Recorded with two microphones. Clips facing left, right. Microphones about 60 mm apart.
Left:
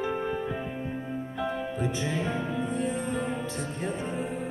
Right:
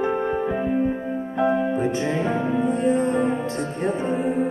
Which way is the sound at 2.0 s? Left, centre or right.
Centre.